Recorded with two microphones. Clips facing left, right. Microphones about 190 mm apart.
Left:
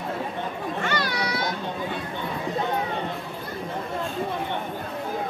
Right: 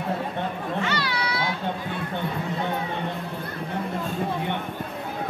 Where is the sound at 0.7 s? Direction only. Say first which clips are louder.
Left 1 dB; 45° left (ahead or behind).